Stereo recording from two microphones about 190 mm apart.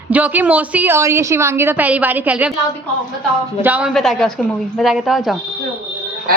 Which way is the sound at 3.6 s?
10° right (ahead or behind).